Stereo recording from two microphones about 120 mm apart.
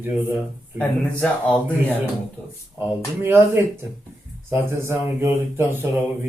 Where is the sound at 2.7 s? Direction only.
20° right (ahead or behind).